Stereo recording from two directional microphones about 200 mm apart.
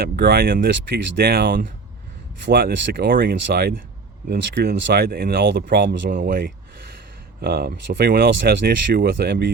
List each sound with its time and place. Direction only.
0.0 s speech: 55° right (ahead or behind)
6.1 s speech: 45° right (ahead or behind)